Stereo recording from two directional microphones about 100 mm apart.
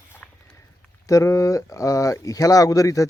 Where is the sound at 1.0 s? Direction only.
35° left (ahead or behind).